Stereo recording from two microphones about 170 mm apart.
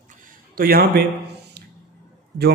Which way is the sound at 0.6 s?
60° right (ahead or behind).